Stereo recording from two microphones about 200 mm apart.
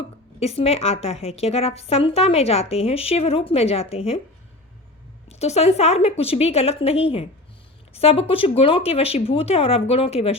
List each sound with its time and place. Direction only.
0.3 s a woman's voice: 30° left (ahead or behind)
5.3 s a woman's voice: 35° left (ahead or behind)